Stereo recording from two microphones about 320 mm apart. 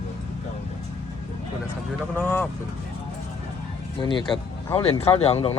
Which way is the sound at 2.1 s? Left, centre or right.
Centre.